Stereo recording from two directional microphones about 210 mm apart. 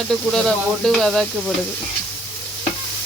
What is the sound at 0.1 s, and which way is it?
Speech, centre (ahead or behind).